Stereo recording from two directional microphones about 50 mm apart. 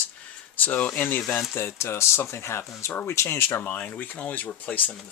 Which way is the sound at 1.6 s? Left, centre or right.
Left.